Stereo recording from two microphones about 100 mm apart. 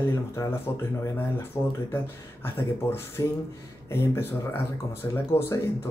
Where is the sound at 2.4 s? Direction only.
20° left (ahead or behind).